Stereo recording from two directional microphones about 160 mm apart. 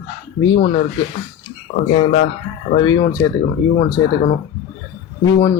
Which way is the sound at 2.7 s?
30° left (ahead or behind).